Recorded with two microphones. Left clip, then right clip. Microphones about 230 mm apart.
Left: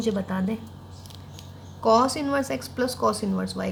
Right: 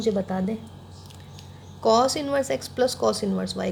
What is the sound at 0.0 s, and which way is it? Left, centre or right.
Speech, centre.